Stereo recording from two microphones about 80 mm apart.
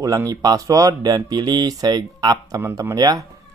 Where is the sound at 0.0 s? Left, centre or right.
Right.